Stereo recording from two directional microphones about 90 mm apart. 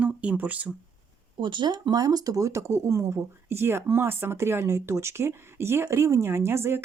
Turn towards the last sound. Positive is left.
turn(degrees=-25)  # may be behind; listen again after turning